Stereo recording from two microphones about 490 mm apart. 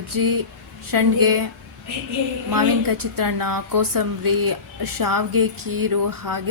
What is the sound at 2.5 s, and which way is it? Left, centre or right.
A woman's voice, right.